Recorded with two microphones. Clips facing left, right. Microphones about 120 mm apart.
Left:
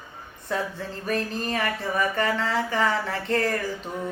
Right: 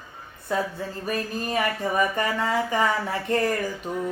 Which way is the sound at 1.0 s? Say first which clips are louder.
Left 2 dB; 10° right (ahead or behind).